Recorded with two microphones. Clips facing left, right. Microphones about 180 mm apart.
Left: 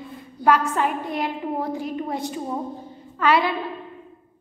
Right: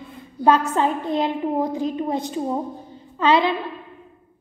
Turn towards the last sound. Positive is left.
turn(degrees=-20)  # may be behind; listen again after turning